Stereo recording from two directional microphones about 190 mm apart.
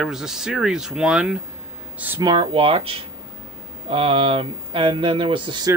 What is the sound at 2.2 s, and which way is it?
Speech, 25° right (ahead or behind).